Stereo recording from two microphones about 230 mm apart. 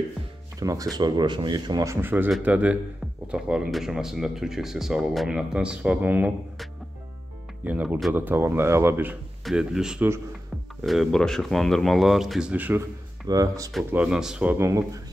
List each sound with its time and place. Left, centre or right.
0.6 s speech: centre
13.7 s speech: centre